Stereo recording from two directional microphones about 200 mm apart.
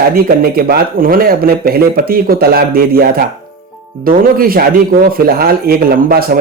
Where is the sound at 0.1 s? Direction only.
50° right (ahead or behind).